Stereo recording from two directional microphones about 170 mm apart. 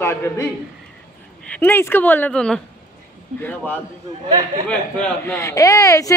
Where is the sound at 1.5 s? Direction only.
10° left (ahead or behind).